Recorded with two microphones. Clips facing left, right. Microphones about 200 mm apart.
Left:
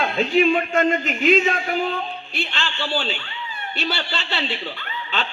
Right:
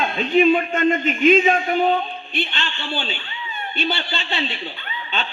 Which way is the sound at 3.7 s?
80° left.